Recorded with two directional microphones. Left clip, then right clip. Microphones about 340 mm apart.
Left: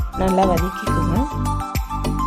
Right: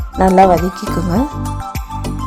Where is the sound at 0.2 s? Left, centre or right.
Centre.